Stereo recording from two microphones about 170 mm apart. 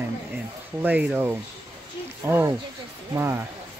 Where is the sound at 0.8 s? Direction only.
10° right (ahead or behind).